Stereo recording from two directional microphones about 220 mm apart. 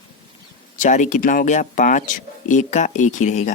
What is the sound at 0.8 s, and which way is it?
Speech, 35° left (ahead or behind).